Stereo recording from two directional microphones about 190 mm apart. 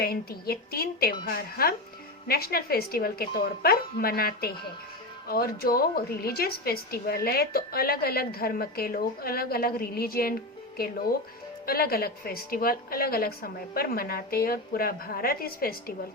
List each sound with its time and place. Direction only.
0.0 s a woman's voice: 55° left (ahead or behind)
11.6 s a woman's voice: 50° left (ahead or behind)